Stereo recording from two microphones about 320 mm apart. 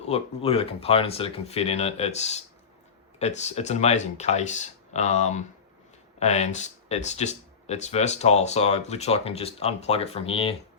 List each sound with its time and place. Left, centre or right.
0.0 s speech: centre